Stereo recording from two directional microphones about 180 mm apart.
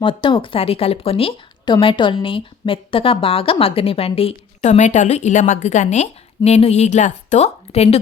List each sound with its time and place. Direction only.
0.0 s speech: 25° left (ahead or behind)